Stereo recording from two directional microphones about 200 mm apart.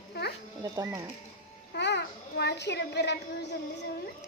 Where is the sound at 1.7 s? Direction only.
60° left (ahead or behind).